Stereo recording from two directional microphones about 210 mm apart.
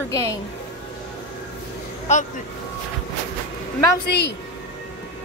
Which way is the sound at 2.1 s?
30° left (ahead or behind).